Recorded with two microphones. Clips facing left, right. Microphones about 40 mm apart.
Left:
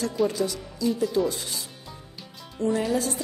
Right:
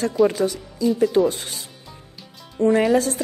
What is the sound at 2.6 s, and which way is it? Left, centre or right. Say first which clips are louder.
Speech: right 8 dB; right.